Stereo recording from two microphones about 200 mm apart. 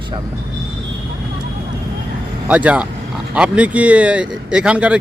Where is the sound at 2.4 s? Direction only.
5° right (ahead or behind).